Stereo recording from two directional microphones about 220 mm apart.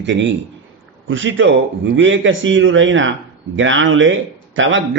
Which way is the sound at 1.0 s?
55° right (ahead or behind).